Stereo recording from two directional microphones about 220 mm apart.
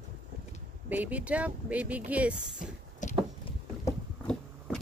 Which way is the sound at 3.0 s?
35° left (ahead or behind).